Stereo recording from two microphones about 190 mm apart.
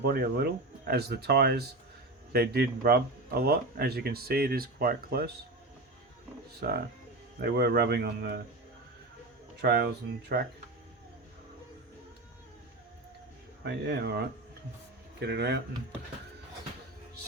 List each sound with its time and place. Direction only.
0.0 s speech: 55° right (ahead or behind)
6.6 s speech: 55° right (ahead or behind)
9.6 s speech: 60° right (ahead or behind)
13.7 s speech: 60° right (ahead or behind)